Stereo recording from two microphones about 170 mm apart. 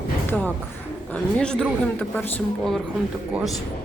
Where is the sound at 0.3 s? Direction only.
10° left (ahead or behind).